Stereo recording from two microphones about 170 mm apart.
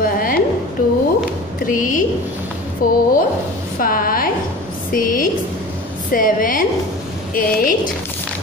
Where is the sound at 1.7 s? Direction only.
50° left (ahead or behind).